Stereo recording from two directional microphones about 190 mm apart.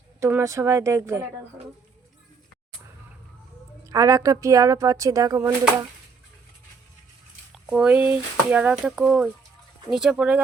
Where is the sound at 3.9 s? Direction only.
15° right (ahead or behind).